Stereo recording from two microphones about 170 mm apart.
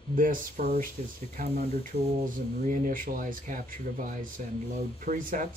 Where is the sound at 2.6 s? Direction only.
50° right (ahead or behind).